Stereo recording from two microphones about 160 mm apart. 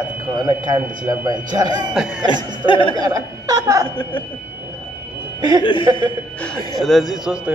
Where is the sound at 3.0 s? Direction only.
25° right (ahead or behind).